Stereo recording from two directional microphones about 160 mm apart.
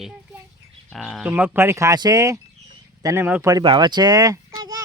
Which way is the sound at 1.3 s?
10° right (ahead or behind).